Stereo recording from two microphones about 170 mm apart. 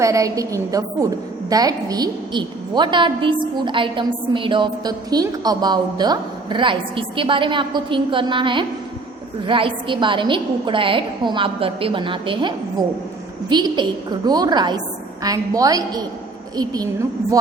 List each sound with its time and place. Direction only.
0.0 s a woman's voice: 20° right (ahead or behind)